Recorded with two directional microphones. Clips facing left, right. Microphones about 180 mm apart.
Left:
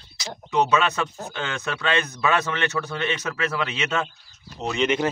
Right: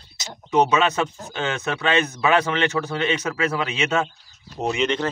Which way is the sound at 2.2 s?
20° right (ahead or behind).